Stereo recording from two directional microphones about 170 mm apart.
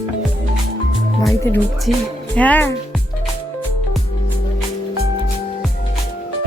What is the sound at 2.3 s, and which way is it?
Music, 10° left (ahead or behind).